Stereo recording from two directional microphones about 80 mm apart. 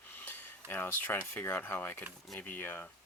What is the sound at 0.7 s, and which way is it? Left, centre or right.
Speech, left.